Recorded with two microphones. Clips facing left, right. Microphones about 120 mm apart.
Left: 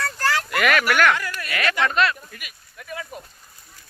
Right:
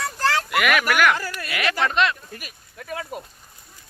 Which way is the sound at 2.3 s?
35° right (ahead or behind).